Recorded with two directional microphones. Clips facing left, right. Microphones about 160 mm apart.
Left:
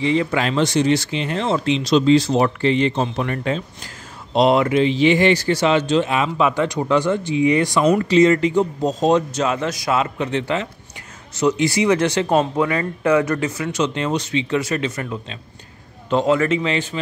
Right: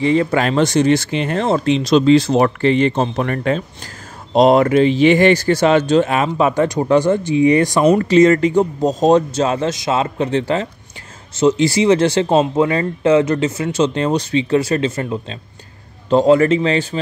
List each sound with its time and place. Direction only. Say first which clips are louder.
0.0 s speech: right 4 dB; 45° right (ahead or behind)
4.3 s speech: right 4 dB; 40° right (ahead or behind)
9.3 s speech: right 4 dB; 30° right (ahead or behind)